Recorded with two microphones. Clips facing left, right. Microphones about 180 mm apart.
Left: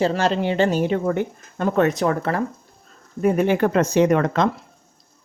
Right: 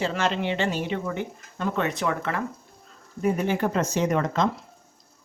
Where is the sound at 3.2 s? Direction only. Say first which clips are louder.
Left 6 dB; 65° left (ahead or behind).